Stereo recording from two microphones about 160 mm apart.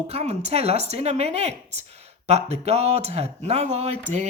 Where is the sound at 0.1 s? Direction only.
45° right (ahead or behind).